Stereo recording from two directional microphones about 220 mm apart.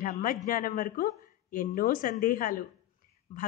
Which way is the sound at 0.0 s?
40° left (ahead or behind).